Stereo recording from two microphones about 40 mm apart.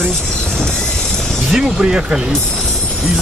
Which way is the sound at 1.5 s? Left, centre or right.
Right.